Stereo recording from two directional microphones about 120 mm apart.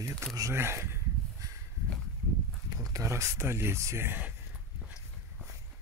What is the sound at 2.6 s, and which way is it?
Speech, 30° right (ahead or behind).